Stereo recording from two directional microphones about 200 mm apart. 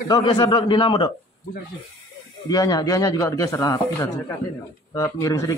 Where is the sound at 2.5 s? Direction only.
20° left (ahead or behind).